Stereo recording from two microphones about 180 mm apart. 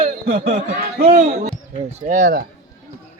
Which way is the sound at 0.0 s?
40° right (ahead or behind).